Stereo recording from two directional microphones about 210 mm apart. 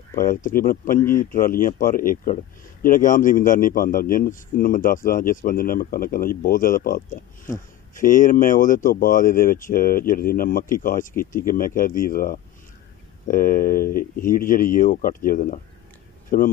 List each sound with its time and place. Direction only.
0.1 s speech: 40° left (ahead or behind)